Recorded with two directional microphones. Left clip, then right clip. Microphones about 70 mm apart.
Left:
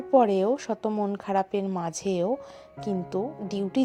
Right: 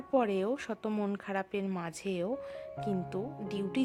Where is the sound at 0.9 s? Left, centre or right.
Centre.